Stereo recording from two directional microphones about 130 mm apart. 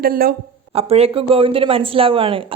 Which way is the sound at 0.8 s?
50° right (ahead or behind).